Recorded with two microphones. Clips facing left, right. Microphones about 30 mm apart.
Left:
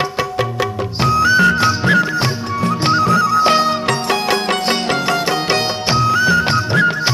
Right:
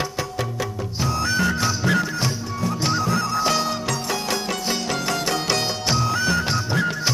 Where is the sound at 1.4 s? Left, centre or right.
Left.